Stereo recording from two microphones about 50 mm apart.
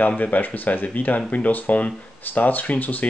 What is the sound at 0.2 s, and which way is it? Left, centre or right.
Speech, left.